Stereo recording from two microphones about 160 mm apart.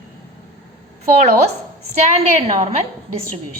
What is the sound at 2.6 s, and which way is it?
Speech, 40° right (ahead or behind).